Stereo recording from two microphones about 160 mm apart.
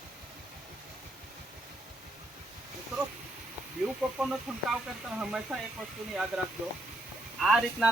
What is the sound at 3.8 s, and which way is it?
Speech, 5° right (ahead or behind).